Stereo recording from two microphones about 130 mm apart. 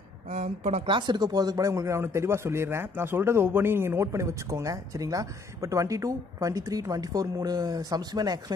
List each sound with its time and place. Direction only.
0.3 s speech: 55° right (ahead or behind)
0.8 s speech: 35° right (ahead or behind)